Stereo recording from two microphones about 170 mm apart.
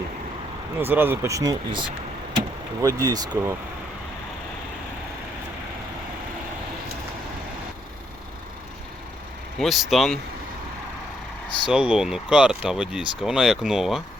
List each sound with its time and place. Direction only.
0.8 s speech: 10° right (ahead or behind)
9.6 s speech: centre (ahead or behind)
11.7 s speech: 5° right (ahead or behind)